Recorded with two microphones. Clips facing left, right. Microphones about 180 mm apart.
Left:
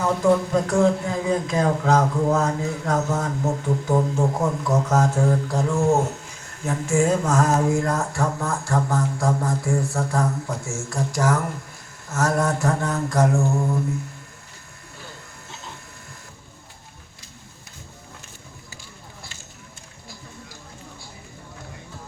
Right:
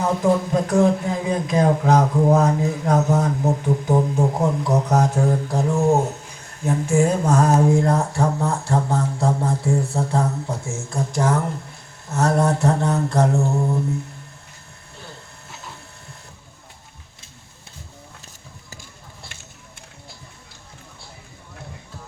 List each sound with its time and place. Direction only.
0.0 s speech: 20° right (ahead or behind)
7.7 s speech: 25° right (ahead or behind)